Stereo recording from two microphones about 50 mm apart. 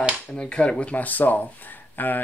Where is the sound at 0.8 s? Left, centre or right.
Left.